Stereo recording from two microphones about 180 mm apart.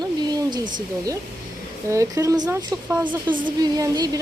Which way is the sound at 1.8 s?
15° right (ahead or behind).